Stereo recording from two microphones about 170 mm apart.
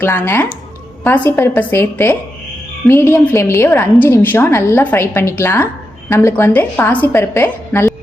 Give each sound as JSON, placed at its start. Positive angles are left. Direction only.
{"t": 0.0, "sound": "a woman's voice", "side_deg": 15}